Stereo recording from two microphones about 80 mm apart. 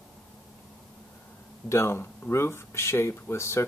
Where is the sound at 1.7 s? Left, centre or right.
Left.